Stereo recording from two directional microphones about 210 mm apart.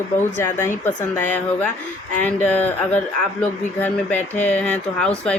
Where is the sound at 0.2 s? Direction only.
10° left (ahead or behind).